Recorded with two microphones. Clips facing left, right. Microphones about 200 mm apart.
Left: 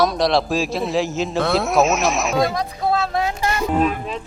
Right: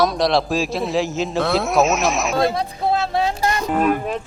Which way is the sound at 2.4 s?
25° right (ahead or behind).